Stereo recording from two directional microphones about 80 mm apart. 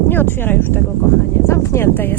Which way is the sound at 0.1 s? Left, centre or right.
Left.